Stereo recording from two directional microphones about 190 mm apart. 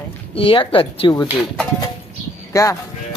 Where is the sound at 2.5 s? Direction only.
15° left (ahead or behind).